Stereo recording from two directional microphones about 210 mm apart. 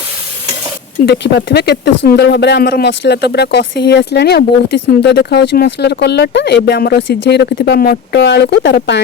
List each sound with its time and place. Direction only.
1.0 s speech: 55° left (ahead or behind)